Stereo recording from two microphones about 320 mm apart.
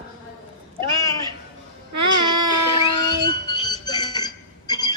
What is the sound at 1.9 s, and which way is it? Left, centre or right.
Music, right.